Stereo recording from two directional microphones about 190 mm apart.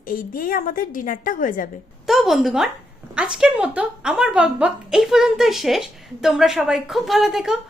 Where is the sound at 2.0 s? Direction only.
Centre (ahead or behind).